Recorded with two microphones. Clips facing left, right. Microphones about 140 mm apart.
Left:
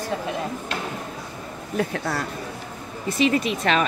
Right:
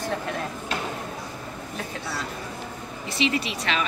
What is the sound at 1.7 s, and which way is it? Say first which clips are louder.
Speech: left 9 dB; 55° left (ahead or behind).